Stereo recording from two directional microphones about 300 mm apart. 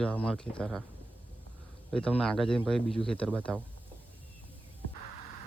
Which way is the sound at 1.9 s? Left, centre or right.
Centre.